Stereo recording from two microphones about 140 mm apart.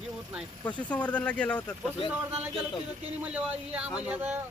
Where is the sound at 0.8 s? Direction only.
10° left (ahead or behind).